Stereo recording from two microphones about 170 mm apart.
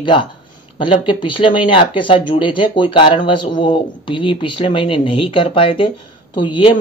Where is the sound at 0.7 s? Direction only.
30° left (ahead or behind).